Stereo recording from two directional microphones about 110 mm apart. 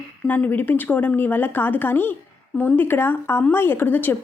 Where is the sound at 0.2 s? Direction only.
15° left (ahead or behind).